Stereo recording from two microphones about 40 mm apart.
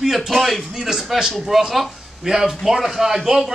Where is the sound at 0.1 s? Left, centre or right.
Centre.